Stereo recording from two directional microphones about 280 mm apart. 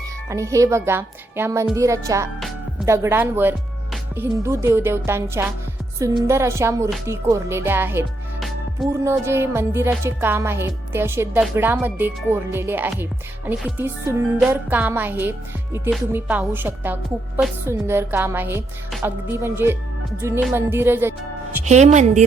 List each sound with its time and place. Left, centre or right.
0.3 s speech: centre
21.6 s a woman's voice: right